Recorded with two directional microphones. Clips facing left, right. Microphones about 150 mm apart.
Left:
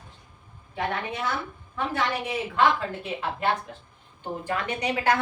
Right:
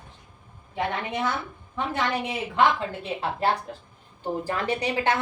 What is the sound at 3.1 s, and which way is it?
A woman's voice, 35° right (ahead or behind).